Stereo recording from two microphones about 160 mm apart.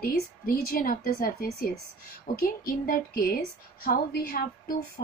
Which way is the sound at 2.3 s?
65° left (ahead or behind).